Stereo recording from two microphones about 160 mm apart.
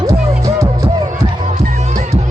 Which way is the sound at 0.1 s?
20° right (ahead or behind).